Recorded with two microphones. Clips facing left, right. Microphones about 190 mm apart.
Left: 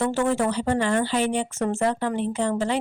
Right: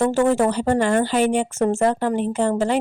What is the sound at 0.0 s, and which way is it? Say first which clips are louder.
Speech: right 5 dB; 45° right (ahead or behind).